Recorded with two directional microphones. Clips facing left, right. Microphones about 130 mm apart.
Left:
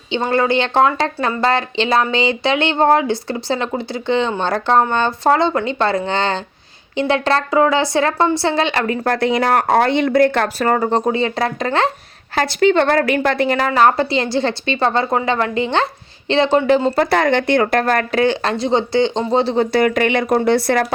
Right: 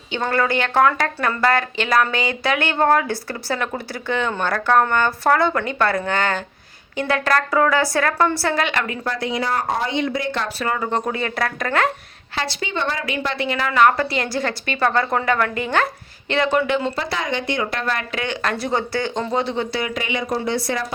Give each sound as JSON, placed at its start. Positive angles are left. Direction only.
{"t": 0.1, "sound": "speech", "side_deg": 25}
{"t": 9.0, "sound": "speech", "side_deg": 65}
{"t": 12.3, "sound": "speech", "side_deg": 50}
{"t": 16.9, "sound": "speech", "side_deg": 55}
{"t": 19.7, "sound": "speech", "side_deg": 55}